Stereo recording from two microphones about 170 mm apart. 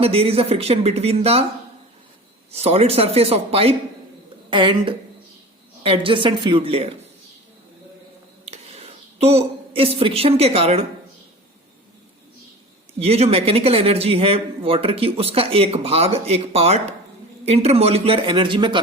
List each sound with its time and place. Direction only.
0.0 s a man's voice: 35° right (ahead or behind)
2.5 s a man's voice: 35° right (ahead or behind)
8.4 s a woman's voice: 40° right (ahead or behind)
13.0 s a man's voice: 35° right (ahead or behind)